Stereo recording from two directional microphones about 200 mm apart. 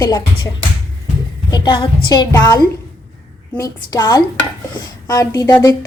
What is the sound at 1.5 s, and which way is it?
A woman's voice, 20° left (ahead or behind).